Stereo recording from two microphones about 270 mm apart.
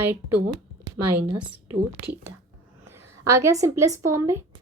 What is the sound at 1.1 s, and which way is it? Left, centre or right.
Speech, centre.